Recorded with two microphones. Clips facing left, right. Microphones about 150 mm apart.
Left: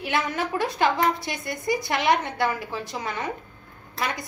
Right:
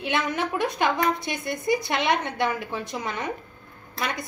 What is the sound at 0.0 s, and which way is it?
A woman's voice, 20° right (ahead or behind).